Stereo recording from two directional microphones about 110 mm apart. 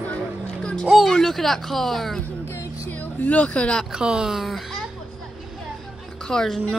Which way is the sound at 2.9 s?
15° left (ahead or behind).